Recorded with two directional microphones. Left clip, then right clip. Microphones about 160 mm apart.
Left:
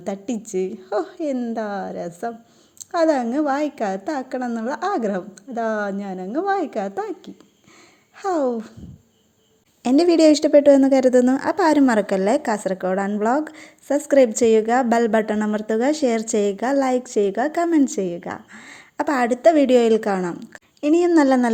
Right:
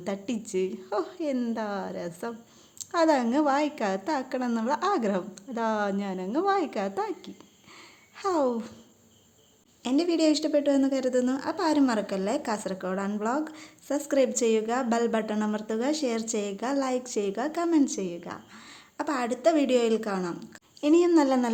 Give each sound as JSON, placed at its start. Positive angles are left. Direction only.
{"t": 0.0, "sound": "a woman's voice", "side_deg": 20}
{"t": 9.8, "sound": "a woman's voice", "side_deg": 45}